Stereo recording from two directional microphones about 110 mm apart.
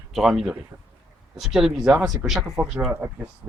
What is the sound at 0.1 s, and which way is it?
Speech, centre (ahead or behind).